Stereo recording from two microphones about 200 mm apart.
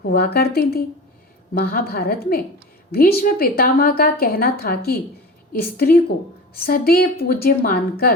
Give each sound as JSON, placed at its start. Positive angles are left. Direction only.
{"t": 0.0, "sound": "a woman's voice", "side_deg": 50}